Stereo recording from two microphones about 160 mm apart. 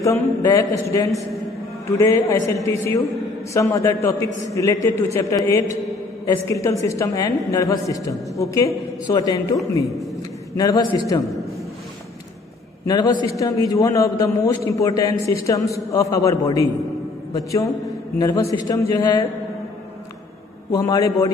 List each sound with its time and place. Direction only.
0.0 s a woman's voice: 20° left (ahead or behind)
10.6 s a woman's voice: 20° left (ahead or behind)
12.8 s a woman's voice: 25° left (ahead or behind)
20.7 s a woman's voice: 20° left (ahead or behind)